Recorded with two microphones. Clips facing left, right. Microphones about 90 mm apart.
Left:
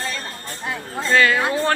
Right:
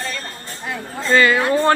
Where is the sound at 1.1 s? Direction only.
Centre (ahead or behind).